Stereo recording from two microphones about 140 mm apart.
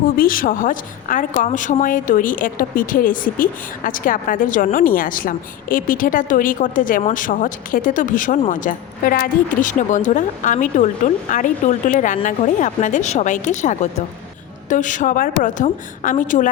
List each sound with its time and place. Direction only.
0.2 s a woman's voice: 85° left; by 16.5 s 65° left (ahead or behind)